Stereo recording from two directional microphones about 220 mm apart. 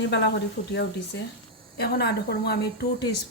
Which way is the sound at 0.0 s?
55° left (ahead or behind).